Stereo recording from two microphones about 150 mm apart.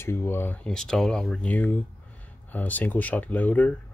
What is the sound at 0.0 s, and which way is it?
Speech, 15° left (ahead or behind).